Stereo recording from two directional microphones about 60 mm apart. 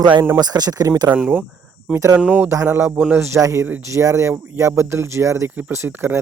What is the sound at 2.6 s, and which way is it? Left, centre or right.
Speech, right.